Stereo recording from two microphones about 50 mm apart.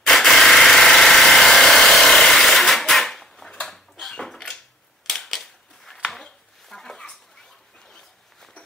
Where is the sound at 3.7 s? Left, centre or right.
Centre.